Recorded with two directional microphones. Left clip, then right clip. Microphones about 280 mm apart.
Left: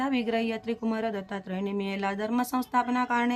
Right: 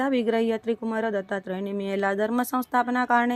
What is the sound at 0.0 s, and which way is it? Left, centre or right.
Speech, centre.